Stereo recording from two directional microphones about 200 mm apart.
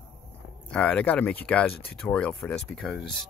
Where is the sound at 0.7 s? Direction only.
5° left (ahead or behind).